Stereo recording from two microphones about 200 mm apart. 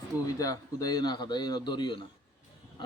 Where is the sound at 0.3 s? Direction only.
15° left (ahead or behind).